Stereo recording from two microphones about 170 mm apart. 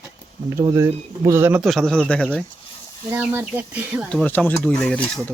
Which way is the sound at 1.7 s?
5° left (ahead or behind).